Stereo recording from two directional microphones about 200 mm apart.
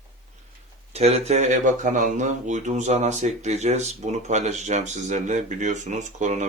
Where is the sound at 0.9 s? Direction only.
30° right (ahead or behind).